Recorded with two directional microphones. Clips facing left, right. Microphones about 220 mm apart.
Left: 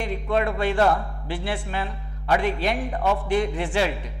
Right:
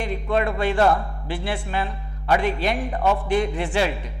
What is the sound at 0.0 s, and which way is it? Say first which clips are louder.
A man's voice: right 1 dB; 10° right (ahead or behind).